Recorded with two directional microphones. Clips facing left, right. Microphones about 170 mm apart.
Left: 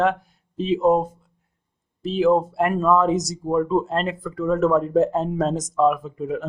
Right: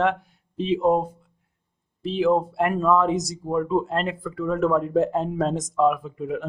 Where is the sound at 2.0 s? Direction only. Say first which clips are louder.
Left 2 dB; 40° left (ahead or behind).